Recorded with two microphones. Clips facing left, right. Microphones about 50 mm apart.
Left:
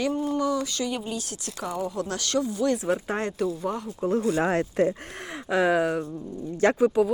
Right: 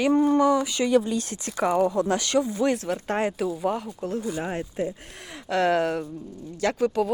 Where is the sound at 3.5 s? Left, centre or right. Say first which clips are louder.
Right 2 dB; centre.